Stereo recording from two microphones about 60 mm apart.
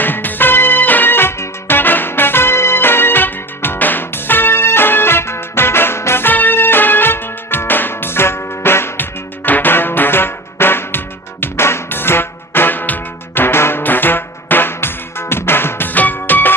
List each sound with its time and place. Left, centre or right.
0.0 s music: left